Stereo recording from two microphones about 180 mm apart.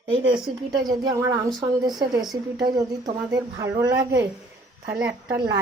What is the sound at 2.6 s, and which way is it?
A woman's voice, 20° right (ahead or behind).